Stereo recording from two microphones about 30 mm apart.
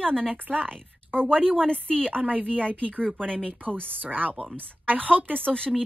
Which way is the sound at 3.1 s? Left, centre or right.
Left.